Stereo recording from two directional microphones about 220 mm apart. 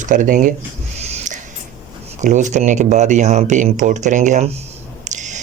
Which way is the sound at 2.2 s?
35° right (ahead or behind).